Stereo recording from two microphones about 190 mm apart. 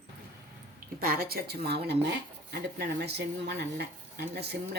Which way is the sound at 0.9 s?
50° right (ahead or behind).